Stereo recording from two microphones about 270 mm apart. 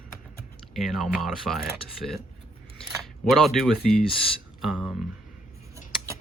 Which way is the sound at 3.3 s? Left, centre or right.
Centre.